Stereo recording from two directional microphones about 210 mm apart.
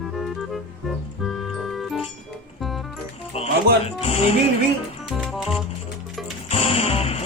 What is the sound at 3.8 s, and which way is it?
Speech, 30° left (ahead or behind).